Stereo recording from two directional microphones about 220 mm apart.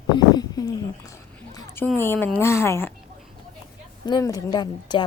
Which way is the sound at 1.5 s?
15° left (ahead or behind).